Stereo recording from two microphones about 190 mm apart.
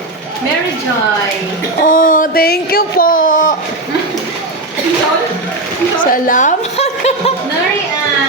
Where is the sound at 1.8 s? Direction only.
45° left (ahead or behind).